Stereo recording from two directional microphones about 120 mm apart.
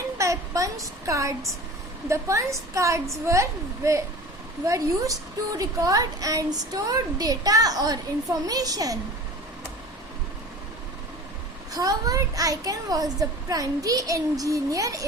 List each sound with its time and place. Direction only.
0.2 s a woman's voice: 25° right (ahead or behind)
11.7 s a child's voice: 30° right (ahead or behind)